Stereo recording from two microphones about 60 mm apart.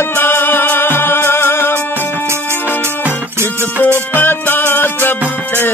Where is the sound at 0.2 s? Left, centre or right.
Left.